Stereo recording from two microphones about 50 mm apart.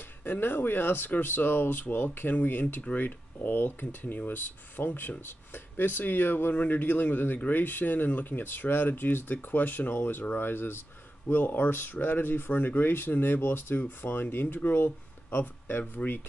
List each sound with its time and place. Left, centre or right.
0.2 s speech: left
6.5 s speech: left
6.8 s speech: left